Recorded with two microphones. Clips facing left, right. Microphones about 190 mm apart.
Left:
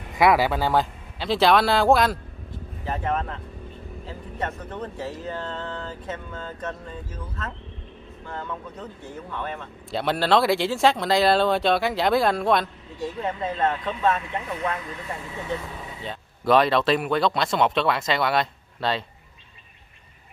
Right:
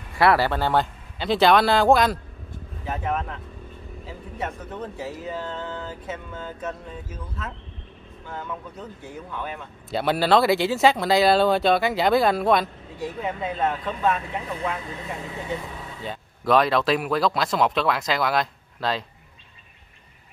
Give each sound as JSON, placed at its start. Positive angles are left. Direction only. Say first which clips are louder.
{"t": 0.1, "sound": "speech", "louder": "even", "side_deg": 15}
{"t": 4.4, "sound": "speech", "louder": "left 1 dB", "side_deg": -5}
{"t": 9.3, "sound": "speech", "louder": "left 2 dB", "side_deg": -5}
{"t": 16.0, "sound": "speech", "louder": "right 1 dB", "side_deg": 0}